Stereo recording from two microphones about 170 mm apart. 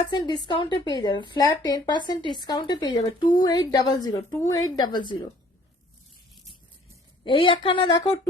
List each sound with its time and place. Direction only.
0.1 s speech: 25° left (ahead or behind)
7.3 s speech: 30° left (ahead or behind)